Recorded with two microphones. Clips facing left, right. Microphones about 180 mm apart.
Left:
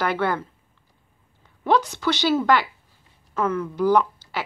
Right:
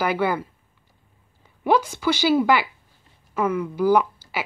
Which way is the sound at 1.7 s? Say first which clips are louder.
Right 1 dB; 10° right (ahead or behind).